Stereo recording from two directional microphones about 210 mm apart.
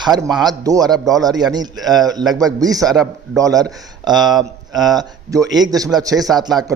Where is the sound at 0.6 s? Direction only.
15° right (ahead or behind).